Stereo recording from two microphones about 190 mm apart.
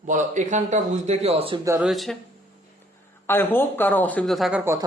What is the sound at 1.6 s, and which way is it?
Speech, 10° right (ahead or behind).